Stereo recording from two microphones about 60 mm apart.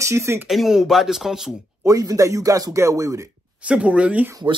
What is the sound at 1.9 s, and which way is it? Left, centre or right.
Speech, right.